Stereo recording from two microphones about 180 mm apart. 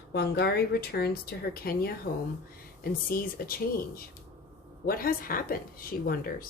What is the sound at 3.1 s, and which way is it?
Speech, 55° left (ahead or behind).